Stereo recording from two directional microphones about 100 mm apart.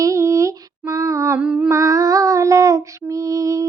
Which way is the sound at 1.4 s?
10° right (ahead or behind).